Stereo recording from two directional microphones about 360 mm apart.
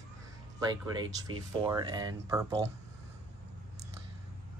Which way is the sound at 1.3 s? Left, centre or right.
Centre.